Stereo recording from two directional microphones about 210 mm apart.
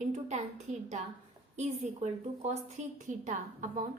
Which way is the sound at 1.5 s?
35° right (ahead or behind).